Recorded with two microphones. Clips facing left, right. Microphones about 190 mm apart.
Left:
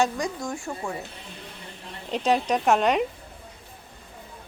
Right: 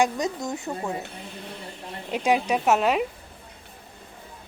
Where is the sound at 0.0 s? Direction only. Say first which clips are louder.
Right 1 dB; 20° right (ahead or behind).